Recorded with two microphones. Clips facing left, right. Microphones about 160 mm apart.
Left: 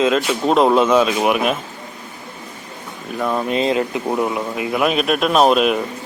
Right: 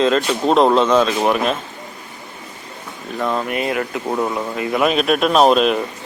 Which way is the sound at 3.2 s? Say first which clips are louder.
Even; 5° left (ahead or behind).